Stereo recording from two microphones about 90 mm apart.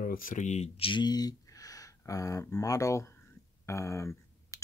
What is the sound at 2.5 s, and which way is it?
Speech, 40° left (ahead or behind).